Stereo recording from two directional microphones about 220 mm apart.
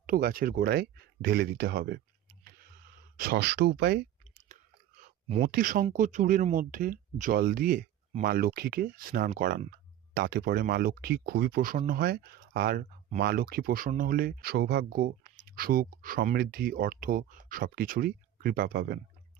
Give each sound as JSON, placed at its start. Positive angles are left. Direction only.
{"t": 0.0, "sound": "speech", "side_deg": -40}
{"t": 3.2, "sound": "speech", "side_deg": -45}
{"t": 5.4, "sound": "speech", "side_deg": -40}